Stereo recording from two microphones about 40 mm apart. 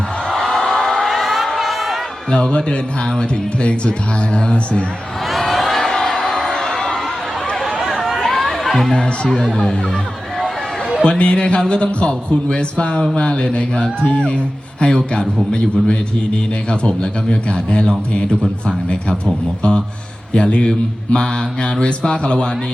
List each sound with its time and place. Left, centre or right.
0.3 s music: centre
1.0 s a sound: centre
2.3 s a man's voice: left
5.3 s a sound: centre
5.8 s a sound: centre
6.5 s crowd: centre
7.8 s chatter: centre
8.9 s a man's voice: centre
9.4 s speech: centre
11.0 s a man's voice: left